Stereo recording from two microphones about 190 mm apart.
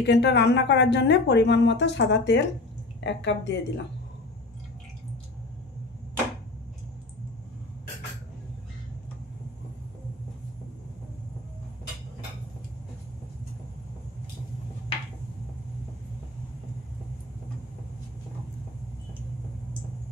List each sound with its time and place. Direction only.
0.0 s a woman's voice: 65° left (ahead or behind)